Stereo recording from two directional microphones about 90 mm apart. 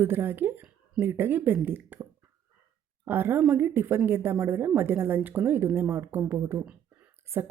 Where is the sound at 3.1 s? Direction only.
25° right (ahead or behind).